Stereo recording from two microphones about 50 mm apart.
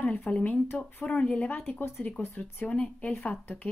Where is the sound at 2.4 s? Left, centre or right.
Left.